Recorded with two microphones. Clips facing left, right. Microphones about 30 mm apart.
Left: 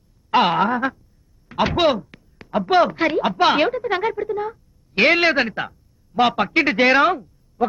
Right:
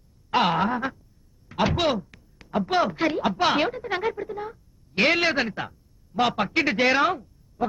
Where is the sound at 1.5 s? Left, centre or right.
Centre.